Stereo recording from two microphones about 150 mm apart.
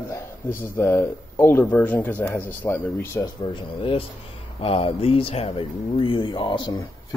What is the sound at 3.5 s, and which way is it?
Speech, 35° left (ahead or behind).